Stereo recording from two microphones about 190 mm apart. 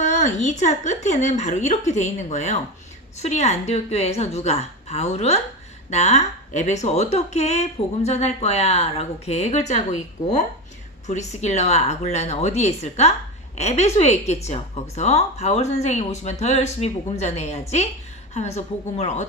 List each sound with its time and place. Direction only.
0.0 s speech: 40° left (ahead or behind)
11.0 s speech: 40° left (ahead or behind)